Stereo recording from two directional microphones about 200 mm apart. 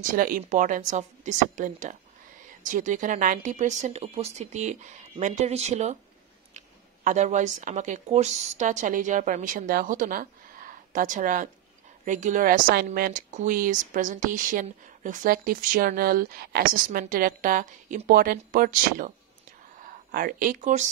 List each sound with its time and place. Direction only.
0.1 s a woman's voice: 45° right (ahead or behind)
7.1 s a woman's voice: 35° right (ahead or behind)